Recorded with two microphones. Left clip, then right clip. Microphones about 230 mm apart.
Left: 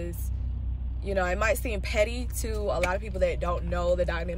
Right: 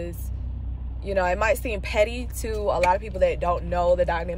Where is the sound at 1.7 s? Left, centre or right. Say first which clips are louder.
Right 4 dB; centre.